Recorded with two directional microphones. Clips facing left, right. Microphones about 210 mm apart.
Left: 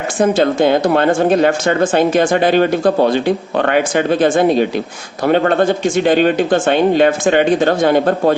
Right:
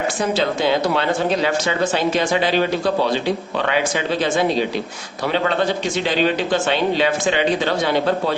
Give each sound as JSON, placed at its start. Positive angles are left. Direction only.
{"t": 0.2, "sound": "speech", "side_deg": 50}